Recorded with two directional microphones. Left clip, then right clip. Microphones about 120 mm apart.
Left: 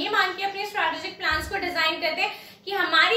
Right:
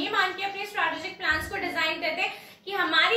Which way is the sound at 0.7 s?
25° left (ahead or behind).